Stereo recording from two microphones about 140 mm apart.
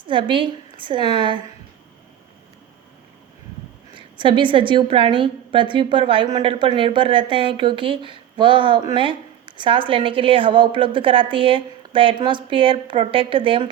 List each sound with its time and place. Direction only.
0.1 s a woman's voice: 35° right (ahead or behind)
3.9 s a woman's voice: 35° right (ahead or behind)